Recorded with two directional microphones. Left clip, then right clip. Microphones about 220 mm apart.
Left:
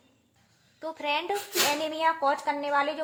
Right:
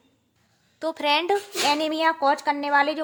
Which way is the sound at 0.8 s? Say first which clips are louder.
Right 7 dB; 55° right (ahead or behind).